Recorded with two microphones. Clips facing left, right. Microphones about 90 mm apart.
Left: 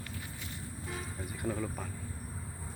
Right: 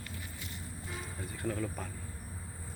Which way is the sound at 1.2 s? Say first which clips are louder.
Even; 15° left (ahead or behind).